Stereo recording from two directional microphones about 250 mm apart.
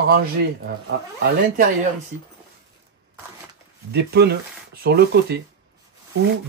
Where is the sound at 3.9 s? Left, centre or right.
Right.